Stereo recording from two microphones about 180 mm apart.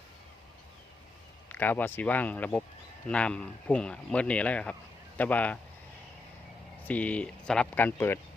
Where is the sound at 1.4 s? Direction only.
10° left (ahead or behind).